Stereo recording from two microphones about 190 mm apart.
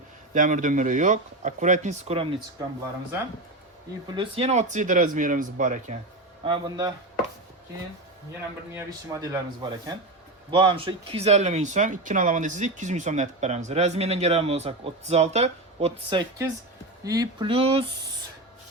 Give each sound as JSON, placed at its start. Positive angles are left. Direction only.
{"t": 0.3, "sound": "speech", "side_deg": -40}
{"t": 4.1, "sound": "speech", "side_deg": -30}
{"t": 6.4, "sound": "speech", "side_deg": -25}
{"t": 8.7, "sound": "speech", "side_deg": -15}
{"t": 17.0, "sound": "speech", "side_deg": -20}